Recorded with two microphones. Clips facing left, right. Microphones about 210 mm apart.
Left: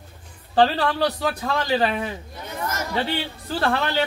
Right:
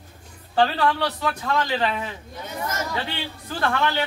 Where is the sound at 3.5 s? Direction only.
35° left (ahead or behind).